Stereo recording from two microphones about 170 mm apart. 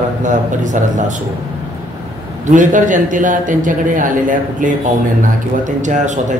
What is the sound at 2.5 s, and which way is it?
A man's voice, 50° right (ahead or behind).